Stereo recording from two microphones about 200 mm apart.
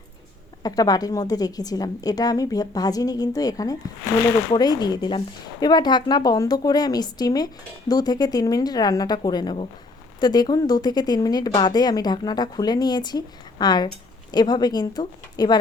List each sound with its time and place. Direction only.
0.6 s speech: 20° left (ahead or behind)